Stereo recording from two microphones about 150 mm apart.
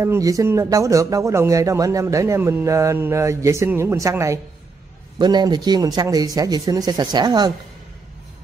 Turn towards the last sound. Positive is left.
turn(degrees=-30)  # may be behind; listen again after turning